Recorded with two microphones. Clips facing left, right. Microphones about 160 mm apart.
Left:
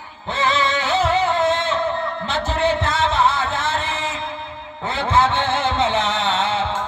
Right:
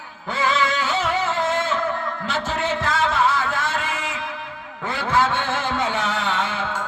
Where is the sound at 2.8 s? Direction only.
20° left (ahead or behind).